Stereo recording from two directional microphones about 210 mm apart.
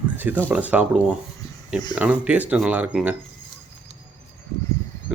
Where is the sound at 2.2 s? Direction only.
5° right (ahead or behind).